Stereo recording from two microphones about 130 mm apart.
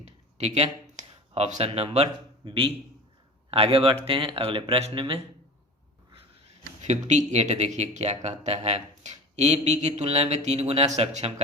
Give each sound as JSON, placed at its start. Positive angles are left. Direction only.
{"t": 0.3, "sound": "speech", "side_deg": -55}
{"t": 2.4, "sound": "a man's voice", "side_deg": -40}
{"t": 6.8, "sound": "speech", "side_deg": -65}